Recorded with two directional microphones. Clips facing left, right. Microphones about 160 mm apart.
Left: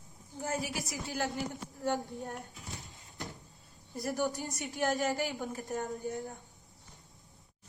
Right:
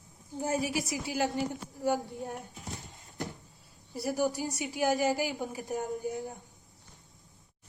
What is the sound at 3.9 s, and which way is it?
Speech, 5° right (ahead or behind).